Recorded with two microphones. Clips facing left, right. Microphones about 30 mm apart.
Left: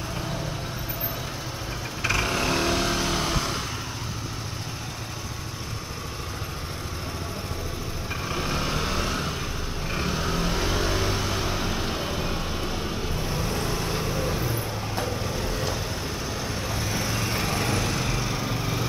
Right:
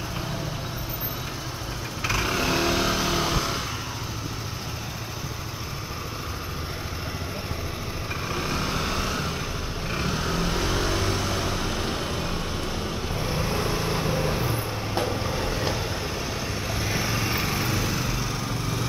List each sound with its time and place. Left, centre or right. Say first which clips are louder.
2.0 s vehicle: even; centre
8.3 s vehicle: even; centre
13.2 s vehicle: right 3 dB; centre